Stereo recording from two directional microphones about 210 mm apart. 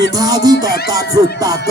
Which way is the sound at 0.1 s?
20° right (ahead or behind).